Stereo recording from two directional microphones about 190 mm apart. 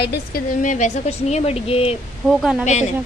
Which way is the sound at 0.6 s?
40° left (ahead or behind).